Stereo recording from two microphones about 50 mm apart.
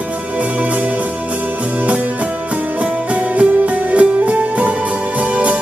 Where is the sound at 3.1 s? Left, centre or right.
Right.